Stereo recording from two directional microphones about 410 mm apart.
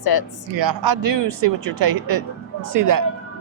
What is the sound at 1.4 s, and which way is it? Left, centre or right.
Speech, right.